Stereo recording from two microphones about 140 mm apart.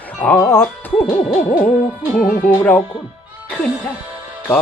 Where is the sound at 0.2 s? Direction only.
10° left (ahead or behind).